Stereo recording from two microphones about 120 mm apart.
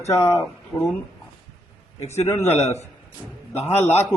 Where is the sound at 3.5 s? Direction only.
65° left (ahead or behind).